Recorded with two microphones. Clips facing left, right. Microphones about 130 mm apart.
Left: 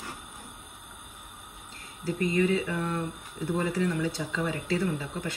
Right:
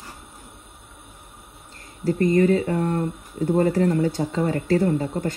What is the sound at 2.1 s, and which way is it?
Speech, 45° right (ahead or behind).